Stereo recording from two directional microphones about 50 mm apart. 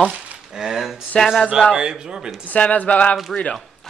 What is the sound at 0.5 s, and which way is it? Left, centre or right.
Speech, centre.